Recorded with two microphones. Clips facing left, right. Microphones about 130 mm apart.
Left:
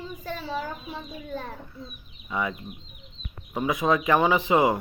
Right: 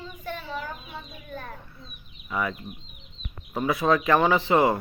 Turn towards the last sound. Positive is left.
turn(degrees=15)  # may be behind; listen again after turning